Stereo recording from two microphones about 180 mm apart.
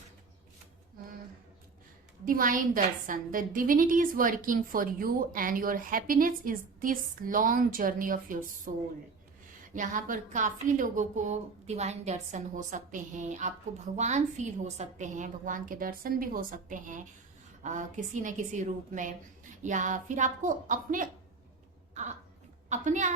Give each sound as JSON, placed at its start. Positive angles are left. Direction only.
{"t": 2.2, "sound": "speech", "side_deg": -50}
{"t": 9.7, "sound": "speech", "side_deg": -45}
{"t": 22.7, "sound": "speech", "side_deg": -45}